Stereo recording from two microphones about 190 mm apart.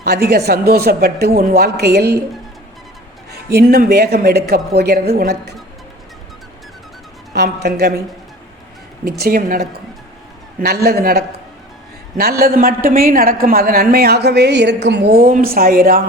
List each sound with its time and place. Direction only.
0.0 s speech: 55° right (ahead or behind)
3.5 s speech: 55° right (ahead or behind)
7.3 s speech: 60° right (ahead or behind)
9.0 s speech: 55° right (ahead or behind)
12.4 s speech: 50° right (ahead or behind)